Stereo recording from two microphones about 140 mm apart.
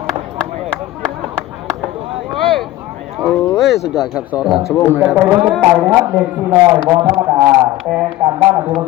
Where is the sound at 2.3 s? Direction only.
Centre (ahead or behind).